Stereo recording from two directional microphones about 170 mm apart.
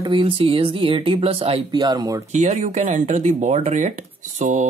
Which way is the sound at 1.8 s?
20° right (ahead or behind).